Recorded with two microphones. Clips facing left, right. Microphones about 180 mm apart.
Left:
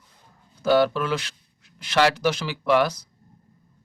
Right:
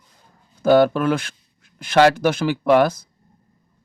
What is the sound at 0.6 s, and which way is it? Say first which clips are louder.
Speech: right 5 dB; 50° right (ahead or behind).